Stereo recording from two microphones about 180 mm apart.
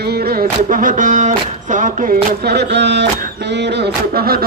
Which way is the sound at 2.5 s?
70° right (ahead or behind).